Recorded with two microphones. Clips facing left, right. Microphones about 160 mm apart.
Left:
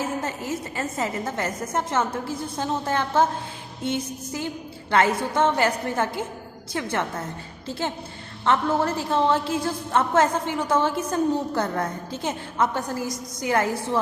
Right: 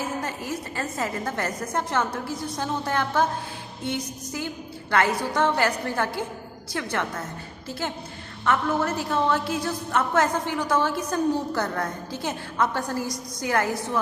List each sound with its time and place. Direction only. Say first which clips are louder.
0.0 s a woman's voice: left 2 dB; 25° left (ahead or behind)